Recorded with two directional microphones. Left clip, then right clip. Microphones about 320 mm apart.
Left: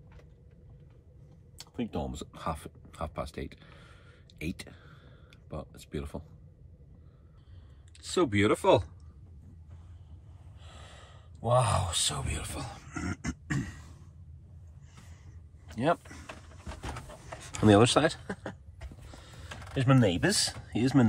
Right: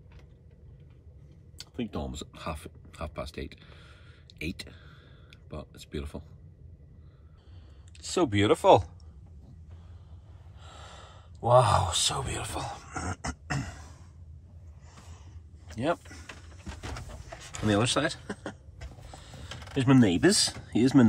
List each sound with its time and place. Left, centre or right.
1.6 s speech: centre
8.0 s speech: centre
10.6 s sigh: centre
12.6 s throat clearing: centre
15.7 s a sound: centre
17.5 s speech: centre